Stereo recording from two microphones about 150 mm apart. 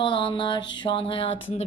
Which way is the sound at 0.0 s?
35° left (ahead or behind).